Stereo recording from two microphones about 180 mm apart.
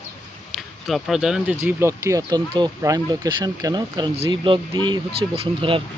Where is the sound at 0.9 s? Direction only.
Centre (ahead or behind).